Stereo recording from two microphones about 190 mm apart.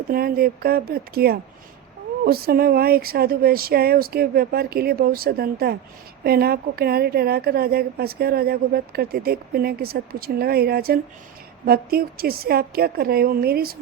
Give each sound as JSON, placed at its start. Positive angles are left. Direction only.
{"t": 0.1, "sound": "a woman's voice", "side_deg": -50}